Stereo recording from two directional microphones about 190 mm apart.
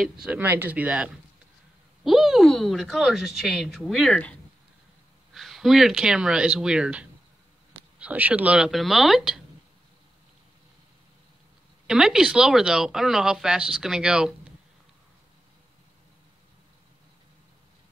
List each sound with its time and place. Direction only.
0.0 s speech: 5° right (ahead or behind)
11.9 s speech: 5° right (ahead or behind)